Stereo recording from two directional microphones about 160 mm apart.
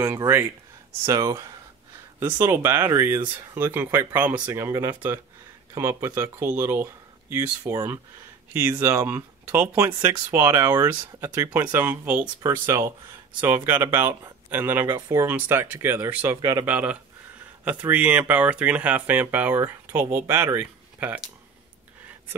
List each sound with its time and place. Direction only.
0.0 s speech: 15° right (ahead or behind)
16.6 s speech: 10° right (ahead or behind)